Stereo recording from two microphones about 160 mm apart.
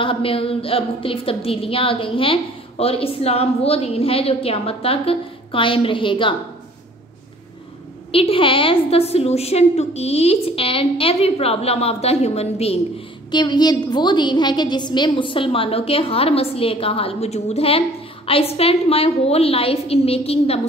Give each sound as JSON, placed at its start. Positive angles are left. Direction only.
{"t": 0.0, "sound": "a woman's voice", "side_deg": 35}
{"t": 8.1, "sound": "a woman's voice", "side_deg": 35}
{"t": 13.3, "sound": "a woman's voice", "side_deg": 25}